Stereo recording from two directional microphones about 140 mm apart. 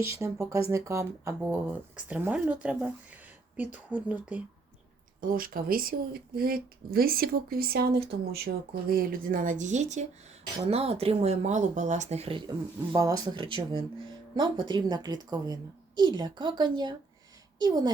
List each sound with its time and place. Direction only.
0.0 s speech: 20° right (ahead or behind)
5.2 s speech: 90° right; by 10.1 s 55° right (ahead or behind)
10.7 s speech: 45° right (ahead or behind)
12.5 s speech: 25° right (ahead or behind)